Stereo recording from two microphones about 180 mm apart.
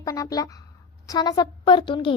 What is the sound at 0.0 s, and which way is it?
A woman's voice, 20° left (ahead or behind).